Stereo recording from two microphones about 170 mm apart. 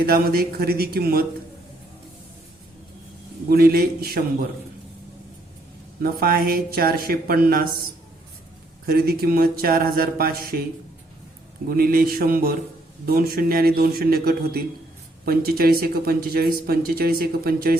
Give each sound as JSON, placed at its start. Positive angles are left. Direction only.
{"t": 0.0, "sound": "speech", "side_deg": -60}
{"t": 3.5, "sound": "speech", "side_deg": -65}
{"t": 6.0, "sound": "speech", "side_deg": -60}
{"t": 8.9, "sound": "speech", "side_deg": -65}
{"t": 11.7, "sound": "speech", "side_deg": -60}